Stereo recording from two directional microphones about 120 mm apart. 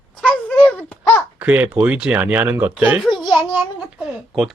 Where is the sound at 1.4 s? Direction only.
10° right (ahead or behind).